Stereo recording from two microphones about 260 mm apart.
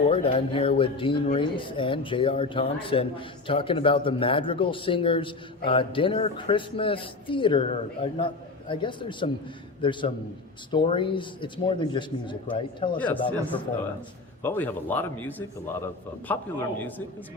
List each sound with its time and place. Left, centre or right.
0.1 s speech: left
14.4 s speech: centre